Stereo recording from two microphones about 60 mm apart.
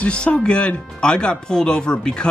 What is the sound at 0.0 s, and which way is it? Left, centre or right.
Speech, centre.